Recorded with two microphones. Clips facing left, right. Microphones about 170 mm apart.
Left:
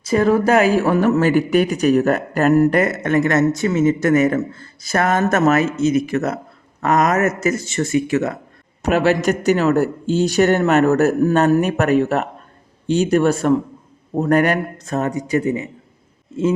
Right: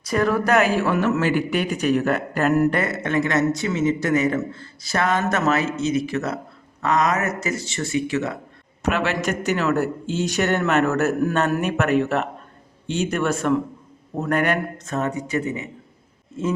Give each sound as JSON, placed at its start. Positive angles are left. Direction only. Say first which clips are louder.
{"t": 0.1, "sound": "speech", "louder": "left 5 dB", "side_deg": 25}